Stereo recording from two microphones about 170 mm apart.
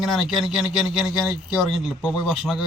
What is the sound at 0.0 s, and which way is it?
Speech, centre (ahead or behind).